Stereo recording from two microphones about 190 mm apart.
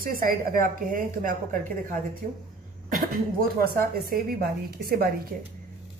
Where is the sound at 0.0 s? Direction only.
50° right (ahead or behind).